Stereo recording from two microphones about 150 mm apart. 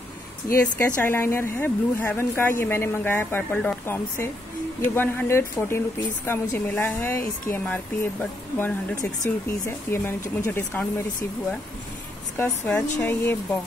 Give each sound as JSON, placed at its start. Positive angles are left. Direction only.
{"t": 0.6, "sound": "speech", "side_deg": 15}
{"t": 12.4, "sound": "speech", "side_deg": 10}